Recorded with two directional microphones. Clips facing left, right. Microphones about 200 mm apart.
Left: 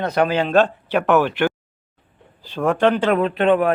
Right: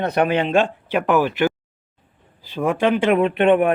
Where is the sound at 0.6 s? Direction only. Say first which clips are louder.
Left 1 dB; 10° right (ahead or behind).